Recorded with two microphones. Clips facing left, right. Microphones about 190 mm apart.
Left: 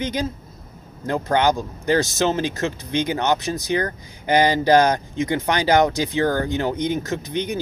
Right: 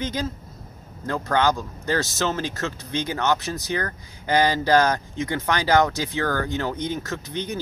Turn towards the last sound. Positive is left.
turn(degrees=15)  # may be behind; listen again after turning